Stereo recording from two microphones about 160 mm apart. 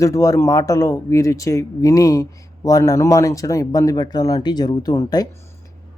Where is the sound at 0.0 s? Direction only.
20° left (ahead or behind).